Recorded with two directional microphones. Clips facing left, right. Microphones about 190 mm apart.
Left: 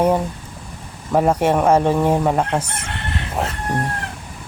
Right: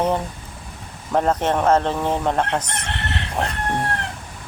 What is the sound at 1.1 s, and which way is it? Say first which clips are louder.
Chicken: left 3 dB; 10° left (ahead or behind).